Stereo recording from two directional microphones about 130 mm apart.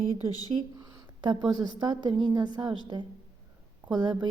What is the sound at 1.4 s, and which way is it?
A woman's voice, 30° right (ahead or behind).